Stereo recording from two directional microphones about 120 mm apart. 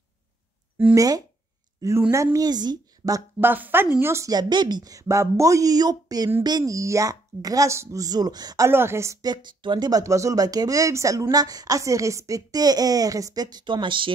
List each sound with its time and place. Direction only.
0.9 s speech: 30° right (ahead or behind)
2.3 s a woman's voice: 35° right (ahead or behind)
3.3 s a woman's voice: 15° right (ahead or behind)
4.3 s speech: 35° right (ahead or behind)
8.6 s speech: 20° right (ahead or behind); by 14.1 s 45° right (ahead or behind)